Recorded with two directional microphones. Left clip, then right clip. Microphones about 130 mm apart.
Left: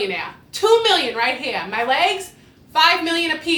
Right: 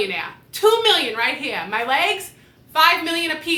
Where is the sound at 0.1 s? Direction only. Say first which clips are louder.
Left 1 dB; 25° left (ahead or behind).